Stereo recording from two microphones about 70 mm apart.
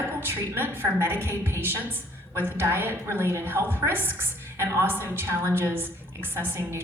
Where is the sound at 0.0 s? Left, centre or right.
Right.